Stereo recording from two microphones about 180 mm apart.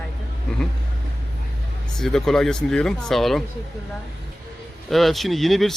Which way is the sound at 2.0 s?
5° left (ahead or behind).